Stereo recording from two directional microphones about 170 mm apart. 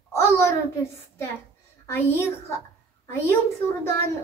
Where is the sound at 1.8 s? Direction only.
15° left (ahead or behind).